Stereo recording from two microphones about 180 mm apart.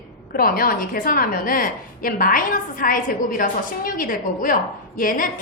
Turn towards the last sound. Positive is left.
turn(degrees=50)  # may be behind; listen again after turning